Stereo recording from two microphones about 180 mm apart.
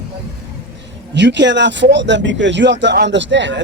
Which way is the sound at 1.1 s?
80° right.